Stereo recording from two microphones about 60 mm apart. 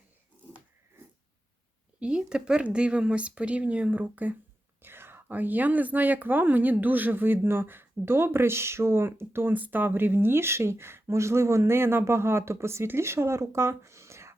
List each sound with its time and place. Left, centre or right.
2.0 s speech: centre
4.8 s speech: right